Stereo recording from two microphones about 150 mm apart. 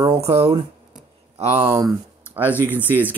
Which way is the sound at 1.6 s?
20° right (ahead or behind).